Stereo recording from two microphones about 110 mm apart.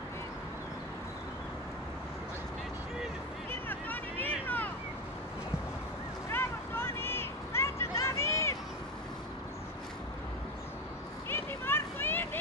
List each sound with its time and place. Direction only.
3.6 s vehicle: 15° left (ahead or behind)
6.2 s a sound: 20° left (ahead or behind)
11.2 s vehicle: 20° left (ahead or behind)